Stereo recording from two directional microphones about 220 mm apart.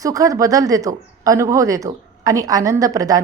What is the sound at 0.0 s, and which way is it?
A woman's voice, 15° right (ahead or behind).